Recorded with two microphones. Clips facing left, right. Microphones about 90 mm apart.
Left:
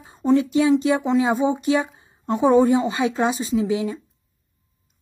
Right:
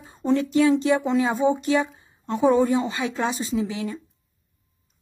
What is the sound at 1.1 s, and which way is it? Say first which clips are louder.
A woman's voice: left 1 dB; 15° left (ahead or behind).